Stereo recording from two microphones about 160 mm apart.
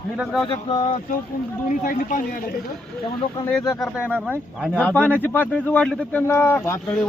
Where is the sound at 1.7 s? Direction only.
55° left (ahead or behind).